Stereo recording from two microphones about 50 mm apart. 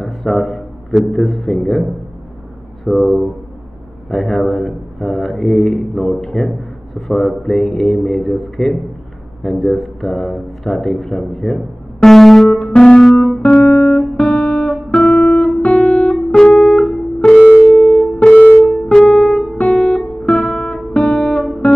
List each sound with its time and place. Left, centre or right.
0.0 s a man's voice: centre
12.5 s music: centre
13.0 s music: centre
13.4 s guitar: centre
13.7 s guitar: left
13.9 s guitar: centre
16.1 s music: centre
17.2 s music: left
17.7 s music: centre
18.2 s music: left
18.9 s music: centre
19.5 s guitar: left